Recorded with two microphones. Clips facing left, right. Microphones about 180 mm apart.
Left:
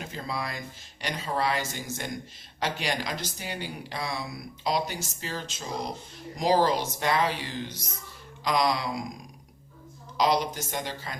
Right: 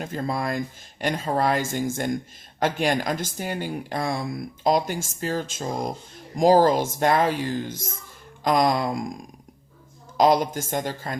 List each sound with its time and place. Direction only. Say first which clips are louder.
0.0 s speech: right 7 dB; 50° right (ahead or behind)
10.2 s speech: right 6 dB; 50° right (ahead or behind)